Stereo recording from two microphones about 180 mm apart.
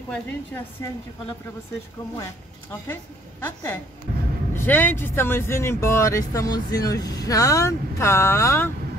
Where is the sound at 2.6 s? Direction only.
10° left (ahead or behind).